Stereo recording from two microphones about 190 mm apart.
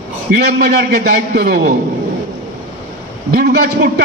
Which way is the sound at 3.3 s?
50° right (ahead or behind).